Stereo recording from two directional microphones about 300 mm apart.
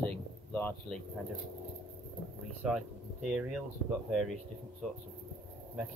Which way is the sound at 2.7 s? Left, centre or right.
Centre.